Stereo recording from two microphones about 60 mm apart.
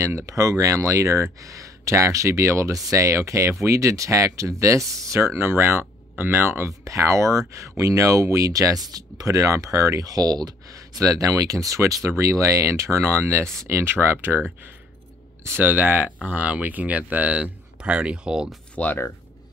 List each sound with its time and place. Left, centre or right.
0.3 s speech: right
6.8 s speech: right; by 18.5 s centre
18.8 s speech: left